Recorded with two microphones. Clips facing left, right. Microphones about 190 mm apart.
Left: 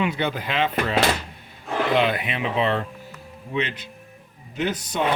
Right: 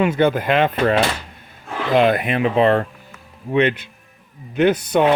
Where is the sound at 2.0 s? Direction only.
45° right (ahead or behind).